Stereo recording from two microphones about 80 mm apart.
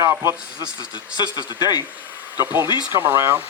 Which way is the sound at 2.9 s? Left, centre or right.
Right.